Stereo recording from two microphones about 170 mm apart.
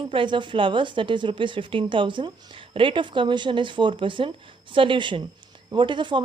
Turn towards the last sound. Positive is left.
turn(degrees=-30)  # may be behind; listen again after turning